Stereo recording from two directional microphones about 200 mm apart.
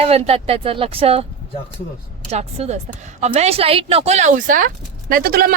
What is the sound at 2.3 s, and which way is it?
Speech, 35° right (ahead or behind).